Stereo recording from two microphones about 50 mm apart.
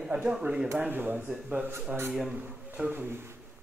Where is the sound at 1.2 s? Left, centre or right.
Right.